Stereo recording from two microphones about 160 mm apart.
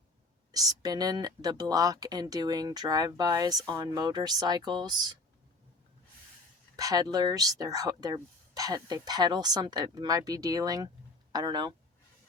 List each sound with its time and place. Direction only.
0.5 s speech: 25° right (ahead or behind)
6.7 s speech: 20° right (ahead or behind)